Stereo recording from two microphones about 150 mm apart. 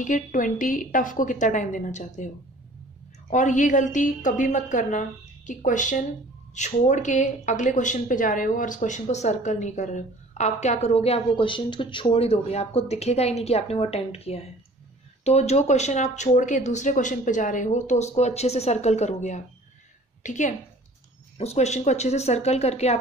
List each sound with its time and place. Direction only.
0.0 s a woman's voice: 60° left (ahead or behind); by 22.9 s 45° left (ahead or behind)